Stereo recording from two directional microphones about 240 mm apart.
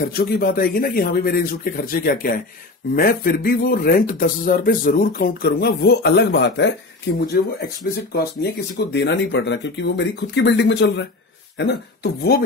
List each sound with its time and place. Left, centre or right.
0.0 s speech: left
7.9 s speech: left